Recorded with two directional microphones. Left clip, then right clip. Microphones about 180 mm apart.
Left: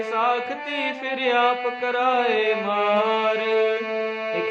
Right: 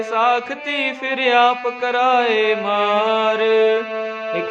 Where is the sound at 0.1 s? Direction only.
30° right (ahead or behind).